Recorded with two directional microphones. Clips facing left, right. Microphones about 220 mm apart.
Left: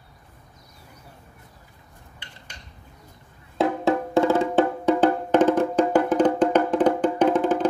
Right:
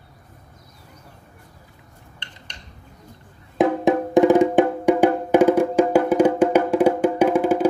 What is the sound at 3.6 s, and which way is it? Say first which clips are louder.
Music: right 4 dB; 15° right (ahead or behind).